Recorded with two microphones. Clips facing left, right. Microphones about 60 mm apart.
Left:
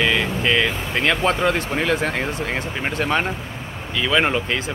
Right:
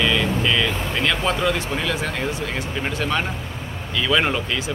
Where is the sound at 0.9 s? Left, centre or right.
Left.